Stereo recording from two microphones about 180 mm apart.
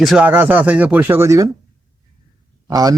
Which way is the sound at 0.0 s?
5° right (ahead or behind).